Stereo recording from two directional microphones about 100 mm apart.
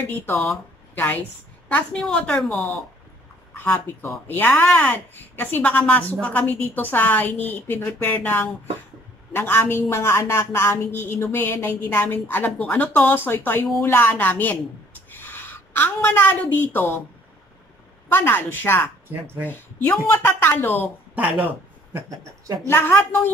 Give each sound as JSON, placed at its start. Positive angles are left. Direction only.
{"t": 0.0, "sound": "a woman's voice", "side_deg": 20}
{"t": 3.5, "sound": "a woman's voice", "side_deg": 20}
{"t": 18.0, "sound": "speech", "side_deg": 20}
{"t": 21.1, "sound": "speech", "side_deg": -15}
{"t": 22.7, "sound": "speech", "side_deg": 20}